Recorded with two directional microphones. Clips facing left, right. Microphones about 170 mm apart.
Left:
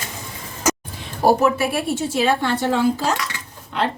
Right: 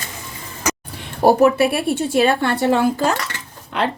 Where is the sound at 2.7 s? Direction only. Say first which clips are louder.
Right 2 dB; 60° right (ahead or behind).